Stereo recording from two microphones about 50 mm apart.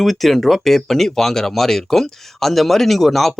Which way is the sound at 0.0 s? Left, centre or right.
Centre.